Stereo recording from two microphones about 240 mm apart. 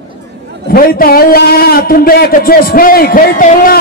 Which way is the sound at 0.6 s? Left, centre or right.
Left.